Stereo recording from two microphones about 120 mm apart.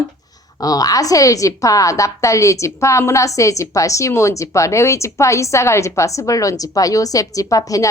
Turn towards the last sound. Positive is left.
turn(degrees=30)  # may be behind; listen again after turning